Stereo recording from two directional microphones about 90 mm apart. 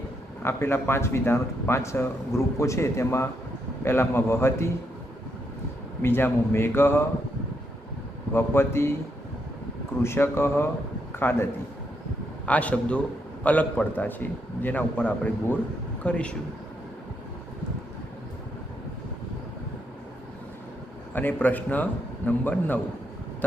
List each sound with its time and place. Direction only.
0.4 s a man's voice: 25° left (ahead or behind)
6.0 s speech: 25° left (ahead or behind)
8.3 s speech: 25° left (ahead or behind)
10.0 s a man's voice: 30° left (ahead or behind)
12.5 s a man's voice: 15° left (ahead or behind)
21.2 s speech: 20° left (ahead or behind)